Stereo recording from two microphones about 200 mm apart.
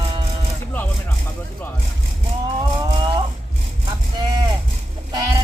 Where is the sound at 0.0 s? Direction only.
25° right (ahead or behind).